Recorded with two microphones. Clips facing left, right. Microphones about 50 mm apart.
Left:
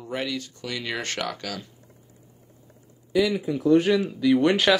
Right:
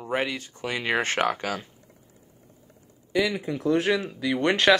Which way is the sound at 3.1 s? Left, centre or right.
Centre.